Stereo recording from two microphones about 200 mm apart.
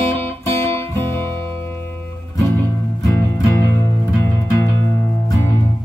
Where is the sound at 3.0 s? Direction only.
15° left (ahead or behind).